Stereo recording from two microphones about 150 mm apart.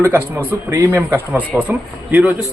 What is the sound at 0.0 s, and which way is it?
Speech, 15° right (ahead or behind).